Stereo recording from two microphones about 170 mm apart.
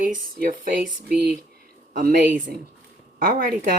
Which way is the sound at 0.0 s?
55° right (ahead or behind).